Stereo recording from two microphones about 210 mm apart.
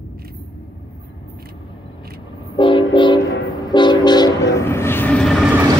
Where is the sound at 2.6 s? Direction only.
25° left (ahead or behind); by 5.4 s 5° left (ahead or behind).